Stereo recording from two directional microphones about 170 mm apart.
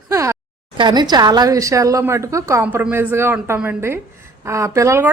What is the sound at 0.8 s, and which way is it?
A woman's voice, 25° right (ahead or behind).